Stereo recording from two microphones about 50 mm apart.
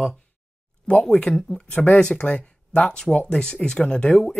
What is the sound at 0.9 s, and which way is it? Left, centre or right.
Speech, centre.